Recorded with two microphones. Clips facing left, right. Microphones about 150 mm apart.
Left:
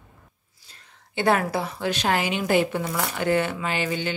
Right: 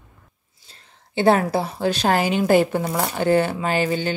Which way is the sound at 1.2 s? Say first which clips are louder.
Right 5 dB; 30° right (ahead or behind).